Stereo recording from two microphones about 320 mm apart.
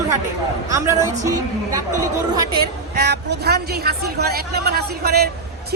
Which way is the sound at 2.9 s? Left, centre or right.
Right.